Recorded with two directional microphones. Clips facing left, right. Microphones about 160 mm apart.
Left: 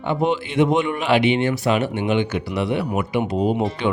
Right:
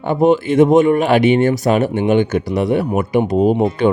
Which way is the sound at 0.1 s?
45° right (ahead or behind).